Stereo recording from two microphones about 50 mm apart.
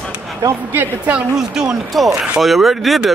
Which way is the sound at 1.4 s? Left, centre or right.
Centre.